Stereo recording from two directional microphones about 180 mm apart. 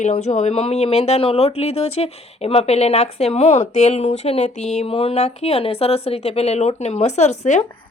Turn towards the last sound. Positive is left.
turn(degrees=40)  # may be behind; listen again after turning